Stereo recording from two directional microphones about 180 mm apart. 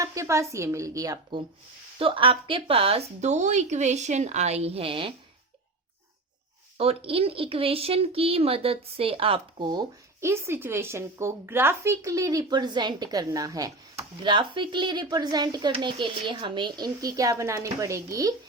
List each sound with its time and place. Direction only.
0.0 s a woman's voice: 15° right (ahead or behind)
6.7 s speech: 30° right (ahead or behind)